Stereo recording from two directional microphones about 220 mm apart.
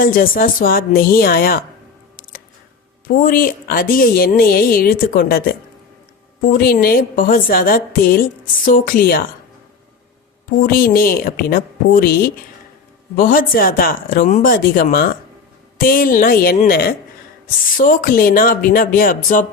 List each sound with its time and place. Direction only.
0.0 s a woman's voice: 40° left (ahead or behind)
3.2 s a woman's voice: 40° left (ahead or behind)
10.6 s a woman's voice: 40° left (ahead or behind)